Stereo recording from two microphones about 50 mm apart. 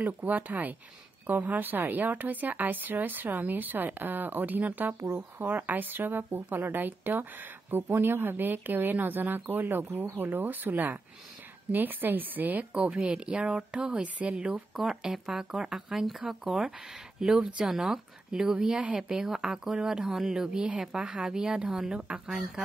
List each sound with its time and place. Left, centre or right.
0.0 s a woman's voice: right
12.7 s speech: right
14.8 s speech: centre